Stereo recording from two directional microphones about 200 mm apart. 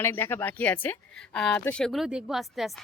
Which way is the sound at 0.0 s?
10° left (ahead or behind).